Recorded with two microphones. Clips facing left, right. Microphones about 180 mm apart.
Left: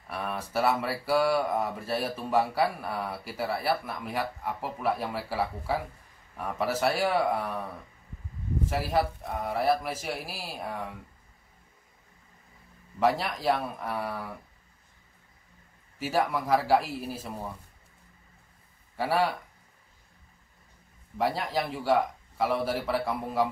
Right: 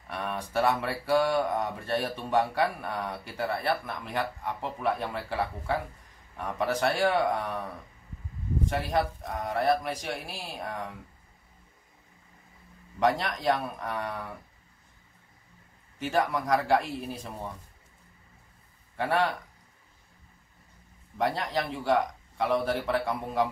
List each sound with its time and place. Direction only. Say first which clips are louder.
0.1 s speech: even; 5° left (ahead or behind)
8.6 s speech: left 1 dB; 5° left (ahead or behind)
13.0 s speech: even; 5° left (ahead or behind)
16.0 s speech: even; 5° left (ahead or behind)
18.9 s speech: even; 5° left (ahead or behind)
21.2 s speech: even; 5° left (ahead or behind)